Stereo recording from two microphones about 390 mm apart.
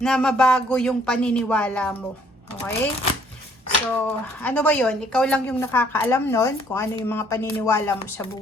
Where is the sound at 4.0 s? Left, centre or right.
Centre.